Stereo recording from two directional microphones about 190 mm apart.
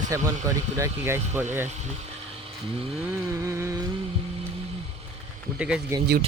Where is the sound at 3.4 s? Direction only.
15° right (ahead or behind).